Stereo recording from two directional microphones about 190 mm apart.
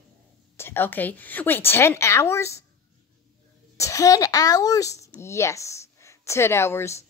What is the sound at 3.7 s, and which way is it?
Speech, 15° left (ahead or behind).